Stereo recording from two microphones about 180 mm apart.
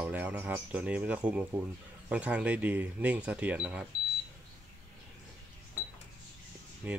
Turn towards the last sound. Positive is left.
turn(degrees=-10)  # may be behind; listen again after turning